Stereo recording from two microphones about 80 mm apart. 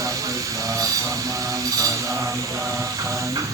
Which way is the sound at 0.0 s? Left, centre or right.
Right.